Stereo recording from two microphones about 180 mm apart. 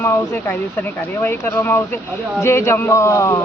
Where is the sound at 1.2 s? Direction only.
10° left (ahead or behind).